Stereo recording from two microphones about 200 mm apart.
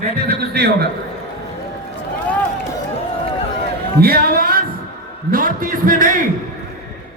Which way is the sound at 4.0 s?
50° right (ahead or behind).